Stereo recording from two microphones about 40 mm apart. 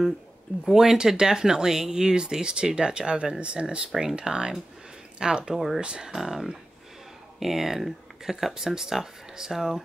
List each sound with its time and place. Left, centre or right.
0.7 s speech: centre
5.5 s speech: centre
5.8 s speech: right
6.1 s speech: centre